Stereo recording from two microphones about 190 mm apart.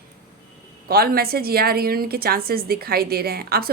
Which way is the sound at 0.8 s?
55° right (ahead or behind).